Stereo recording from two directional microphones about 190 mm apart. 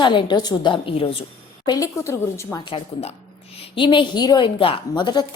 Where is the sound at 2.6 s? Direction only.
30° left (ahead or behind).